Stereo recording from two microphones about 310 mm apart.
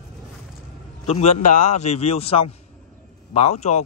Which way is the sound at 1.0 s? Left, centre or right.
Centre.